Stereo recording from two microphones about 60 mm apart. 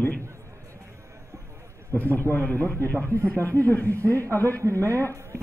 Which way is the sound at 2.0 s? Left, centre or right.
Left.